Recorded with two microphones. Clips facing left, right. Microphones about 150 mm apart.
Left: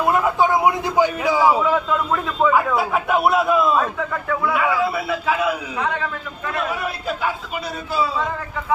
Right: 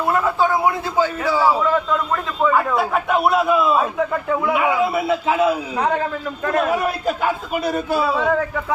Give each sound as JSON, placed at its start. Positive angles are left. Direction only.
{"t": 0.3, "sound": "a man's voice", "side_deg": 20}
{"t": 4.3, "sound": "a man's voice", "side_deg": -20}
{"t": 6.4, "sound": "a man's voice", "side_deg": -45}